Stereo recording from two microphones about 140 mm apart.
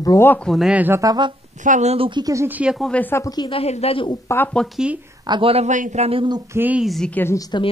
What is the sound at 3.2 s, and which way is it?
Speech, 30° left (ahead or behind).